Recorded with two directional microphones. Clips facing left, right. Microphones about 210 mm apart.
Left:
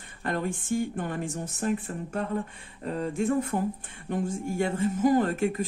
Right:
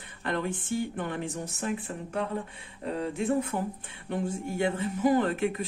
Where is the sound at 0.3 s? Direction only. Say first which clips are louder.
Left 2 dB; 45° left (ahead or behind).